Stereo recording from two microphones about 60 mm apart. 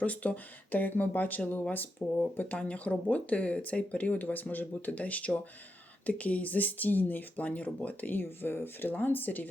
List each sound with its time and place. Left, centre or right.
0.0 s speech: left